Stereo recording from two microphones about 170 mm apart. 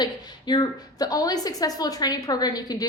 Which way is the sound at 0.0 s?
25° left (ahead or behind).